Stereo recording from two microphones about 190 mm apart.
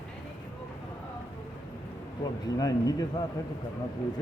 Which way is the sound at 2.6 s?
20° left (ahead or behind).